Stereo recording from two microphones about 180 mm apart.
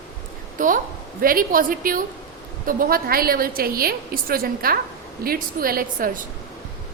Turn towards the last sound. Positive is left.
turn(degrees=-50)  # may be behind; listen again after turning